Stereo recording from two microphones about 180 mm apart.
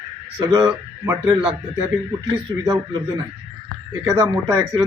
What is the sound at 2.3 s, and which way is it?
Speech, 25° right (ahead or behind).